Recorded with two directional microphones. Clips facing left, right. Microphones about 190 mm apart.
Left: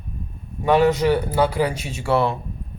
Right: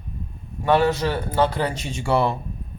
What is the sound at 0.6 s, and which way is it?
A man's voice, 15° left (ahead or behind).